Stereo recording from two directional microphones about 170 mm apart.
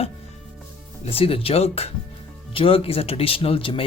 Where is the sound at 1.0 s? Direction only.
35° left (ahead or behind).